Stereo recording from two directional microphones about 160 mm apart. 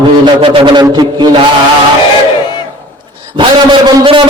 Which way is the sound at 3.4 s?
30° right (ahead or behind).